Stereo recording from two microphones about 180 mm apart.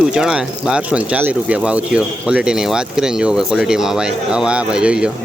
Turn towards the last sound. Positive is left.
turn(degrees=-5)  # may be behind; listen again after turning